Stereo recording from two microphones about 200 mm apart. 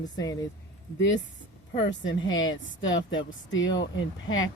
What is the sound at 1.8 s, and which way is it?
Speech, 70° left (ahead or behind).